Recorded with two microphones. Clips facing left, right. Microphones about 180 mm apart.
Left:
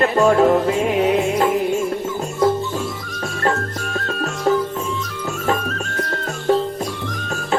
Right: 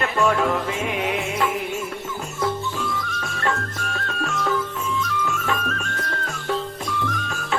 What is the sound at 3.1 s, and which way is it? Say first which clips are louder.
Music: left 8 dB; 40° left (ahead or behind).